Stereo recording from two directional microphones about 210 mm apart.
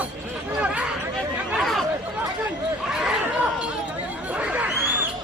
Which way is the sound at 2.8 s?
5° right (ahead or behind).